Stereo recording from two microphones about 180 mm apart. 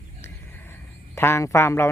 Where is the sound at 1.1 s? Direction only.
15° left (ahead or behind).